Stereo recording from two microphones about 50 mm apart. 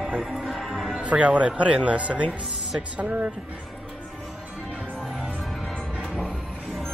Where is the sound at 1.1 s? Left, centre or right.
Right.